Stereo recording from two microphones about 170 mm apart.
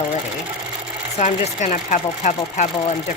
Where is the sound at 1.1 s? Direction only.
45° left (ahead or behind).